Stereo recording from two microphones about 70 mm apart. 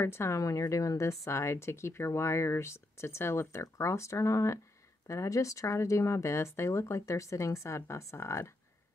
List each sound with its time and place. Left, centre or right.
0.0 s speech: left
0.4 s speech: left